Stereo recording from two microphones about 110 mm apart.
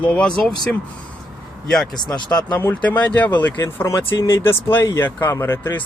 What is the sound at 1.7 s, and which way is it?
Speech, centre (ahead or behind).